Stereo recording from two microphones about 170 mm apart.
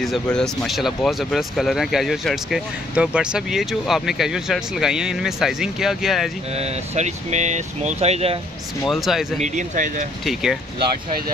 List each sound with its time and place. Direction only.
0.0 s speech: 5° left (ahead or behind)
6.5 s speech: 40° right (ahead or behind)
8.8 s speech: centre (ahead or behind)
9.4 s speech: 45° right (ahead or behind)
10.2 s speech: centre (ahead or behind)